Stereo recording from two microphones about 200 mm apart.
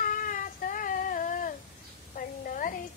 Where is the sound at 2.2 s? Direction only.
45° left (ahead or behind).